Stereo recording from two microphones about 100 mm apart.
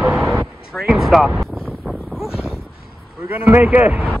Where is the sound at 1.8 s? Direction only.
Centre (ahead or behind).